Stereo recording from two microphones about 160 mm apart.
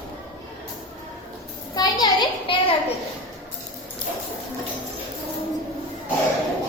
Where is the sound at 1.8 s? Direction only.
25° left (ahead or behind).